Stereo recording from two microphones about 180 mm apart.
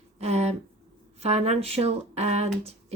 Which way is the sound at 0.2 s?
35° right (ahead or behind).